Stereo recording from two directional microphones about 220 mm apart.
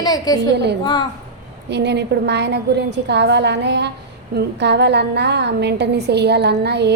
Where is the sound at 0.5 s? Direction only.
50° right (ahead or behind).